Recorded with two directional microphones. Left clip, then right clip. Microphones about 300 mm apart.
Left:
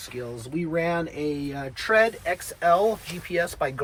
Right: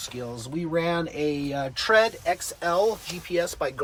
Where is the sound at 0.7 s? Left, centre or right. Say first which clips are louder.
Even; centre.